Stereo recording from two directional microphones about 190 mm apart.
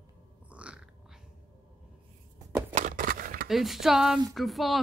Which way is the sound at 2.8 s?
45° right (ahead or behind).